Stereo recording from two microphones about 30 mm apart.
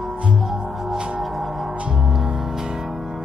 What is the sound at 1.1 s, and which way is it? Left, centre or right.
Gong, centre.